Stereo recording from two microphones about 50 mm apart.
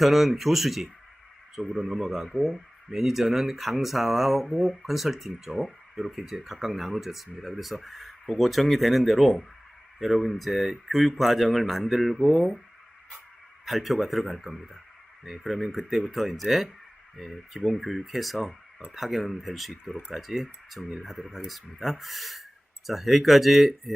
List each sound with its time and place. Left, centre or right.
0.0 s speech: centre
13.7 s speech: centre